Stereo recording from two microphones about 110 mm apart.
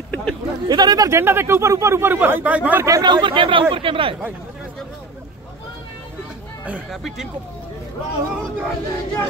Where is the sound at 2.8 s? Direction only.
35° right (ahead or behind); by 4.1 s 55° right (ahead or behind).